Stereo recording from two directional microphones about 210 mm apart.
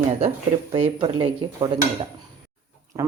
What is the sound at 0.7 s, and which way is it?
Speech, 25° right (ahead or behind).